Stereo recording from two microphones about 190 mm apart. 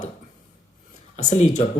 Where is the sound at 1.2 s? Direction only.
40° left (ahead or behind).